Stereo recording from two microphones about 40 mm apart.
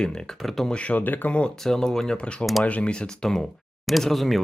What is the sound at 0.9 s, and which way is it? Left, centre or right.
Speech, left.